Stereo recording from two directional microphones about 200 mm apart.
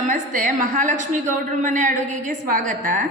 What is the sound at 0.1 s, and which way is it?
A woman's voice, 40° right (ahead or behind).